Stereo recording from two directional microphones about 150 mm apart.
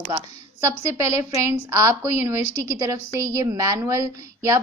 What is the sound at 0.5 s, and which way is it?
A woman's voice, 20° right (ahead or behind).